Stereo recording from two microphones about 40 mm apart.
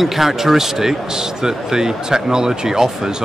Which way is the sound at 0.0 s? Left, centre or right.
Centre.